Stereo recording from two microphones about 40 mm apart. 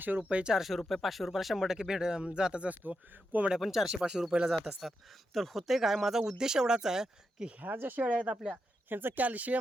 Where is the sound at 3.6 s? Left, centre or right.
Centre.